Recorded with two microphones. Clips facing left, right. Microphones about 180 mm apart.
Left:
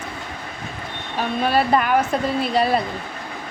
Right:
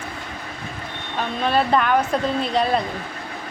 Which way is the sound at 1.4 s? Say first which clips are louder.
Even; 10° left (ahead or behind).